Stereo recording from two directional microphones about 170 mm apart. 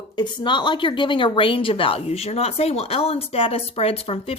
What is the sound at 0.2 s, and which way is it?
A woman's voice, 25° left (ahead or behind).